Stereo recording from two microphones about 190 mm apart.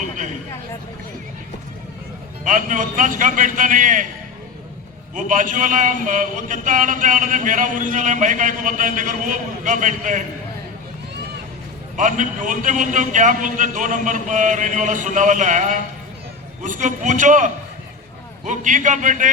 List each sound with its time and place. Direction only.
2.4 s a man's voice: 40° right (ahead or behind)
5.1 s a man's voice: 45° right (ahead or behind)
11.9 s a man's voice: 40° right (ahead or behind)